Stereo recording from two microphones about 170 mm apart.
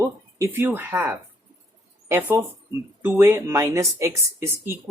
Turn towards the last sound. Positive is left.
turn(degrees=-15)  # may be behind; listen again after turning